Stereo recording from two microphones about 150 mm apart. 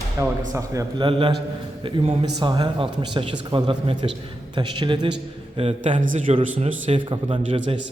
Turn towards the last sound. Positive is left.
turn(degrees=-35)  # may be behind; listen again after turning